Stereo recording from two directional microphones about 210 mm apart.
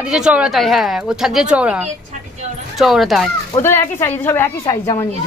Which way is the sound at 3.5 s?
15° left (ahead or behind).